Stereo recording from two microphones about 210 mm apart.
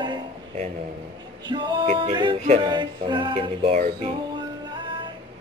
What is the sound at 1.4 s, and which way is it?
Music, 20° right (ahead or behind).